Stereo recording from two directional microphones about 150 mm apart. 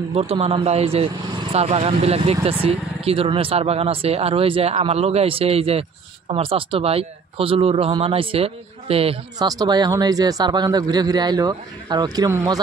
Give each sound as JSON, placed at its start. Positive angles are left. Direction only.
{"t": 0.1, "sound": "speech", "side_deg": -40}
{"t": 9.4, "sound": "a man's voice", "side_deg": -25}